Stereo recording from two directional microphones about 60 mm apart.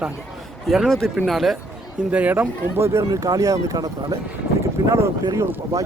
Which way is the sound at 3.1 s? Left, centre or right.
Right.